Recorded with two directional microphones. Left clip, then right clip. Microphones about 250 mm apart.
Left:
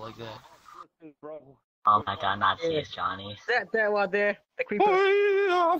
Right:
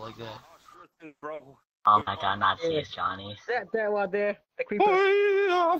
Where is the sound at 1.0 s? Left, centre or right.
Right.